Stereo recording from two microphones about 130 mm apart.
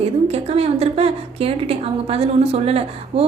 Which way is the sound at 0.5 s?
50° right (ahead or behind).